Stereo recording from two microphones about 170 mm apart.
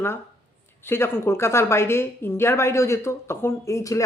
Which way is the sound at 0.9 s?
15° left (ahead or behind).